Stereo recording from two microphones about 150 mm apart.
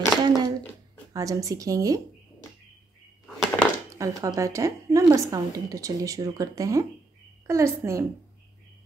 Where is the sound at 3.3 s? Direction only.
Centre (ahead or behind).